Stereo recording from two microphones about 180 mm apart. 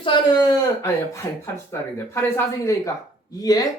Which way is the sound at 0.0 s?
25° left (ahead or behind).